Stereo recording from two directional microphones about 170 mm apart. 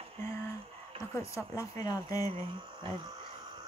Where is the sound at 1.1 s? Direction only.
15° left (ahead or behind).